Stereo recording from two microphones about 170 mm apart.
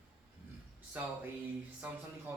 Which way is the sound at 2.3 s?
10° right (ahead or behind).